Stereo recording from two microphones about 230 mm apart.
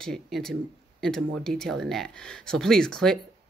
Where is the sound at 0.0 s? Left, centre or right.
Centre.